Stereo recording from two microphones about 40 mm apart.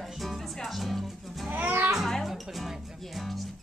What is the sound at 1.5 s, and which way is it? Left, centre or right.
Music, right.